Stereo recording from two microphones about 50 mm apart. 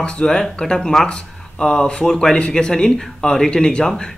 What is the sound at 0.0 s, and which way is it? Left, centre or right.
Speech, centre.